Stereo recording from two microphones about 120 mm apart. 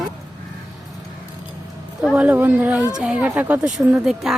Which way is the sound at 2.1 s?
10° right (ahead or behind).